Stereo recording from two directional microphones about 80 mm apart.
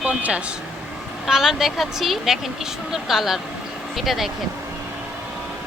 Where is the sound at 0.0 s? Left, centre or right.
Centre.